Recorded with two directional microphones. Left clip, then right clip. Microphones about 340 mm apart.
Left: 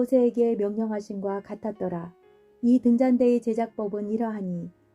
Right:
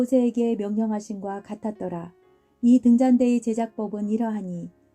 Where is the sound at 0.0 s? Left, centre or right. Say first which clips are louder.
Left 1 dB; right.